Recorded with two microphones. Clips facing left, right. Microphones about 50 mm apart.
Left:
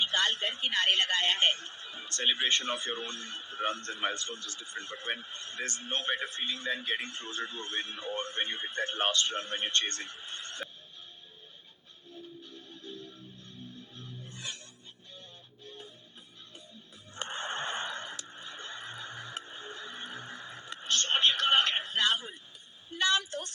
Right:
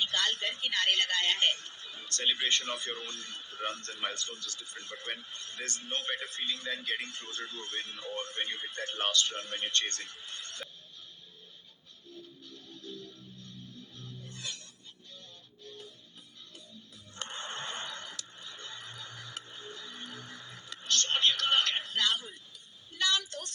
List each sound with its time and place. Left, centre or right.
0.0 s speech: left
12.5 s music: left
17.2 s a sound: left